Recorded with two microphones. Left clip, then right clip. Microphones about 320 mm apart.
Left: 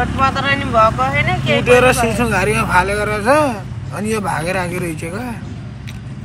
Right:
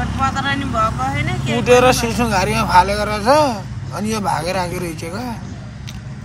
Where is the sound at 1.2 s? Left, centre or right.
Right.